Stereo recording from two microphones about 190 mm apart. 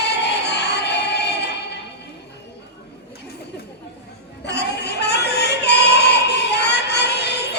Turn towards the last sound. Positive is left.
turn(degrees=60)  # may be behind; listen again after turning